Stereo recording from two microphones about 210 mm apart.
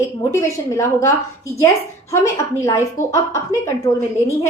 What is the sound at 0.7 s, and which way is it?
Speech, 15° left (ahead or behind).